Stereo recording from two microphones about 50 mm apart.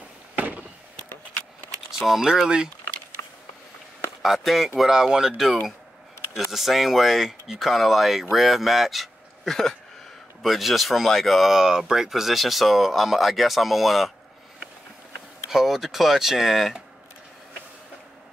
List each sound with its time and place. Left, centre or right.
0.4 s fireworks: right
1.9 s speech: centre
4.2 s speech: centre
15.5 s speech: centre